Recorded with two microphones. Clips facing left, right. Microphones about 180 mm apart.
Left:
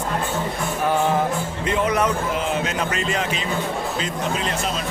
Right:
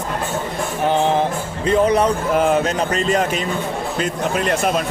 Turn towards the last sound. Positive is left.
turn(degrees=-60)  # may be behind; listen again after turning